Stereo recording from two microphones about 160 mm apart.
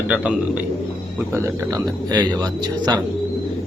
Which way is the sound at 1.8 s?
25° right (ahead or behind).